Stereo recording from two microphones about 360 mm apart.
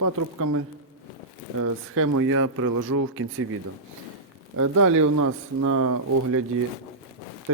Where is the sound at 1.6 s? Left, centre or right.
Right.